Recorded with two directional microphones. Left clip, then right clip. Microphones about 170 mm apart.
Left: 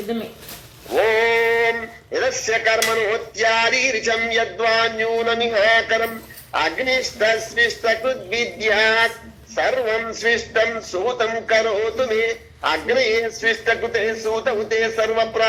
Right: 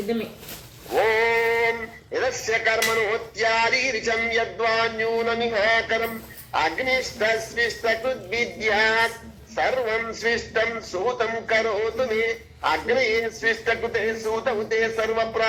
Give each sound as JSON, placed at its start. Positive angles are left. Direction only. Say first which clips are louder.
{"t": 0.9, "sound": "a man's voice", "louder": "left 3 dB", "side_deg": 30}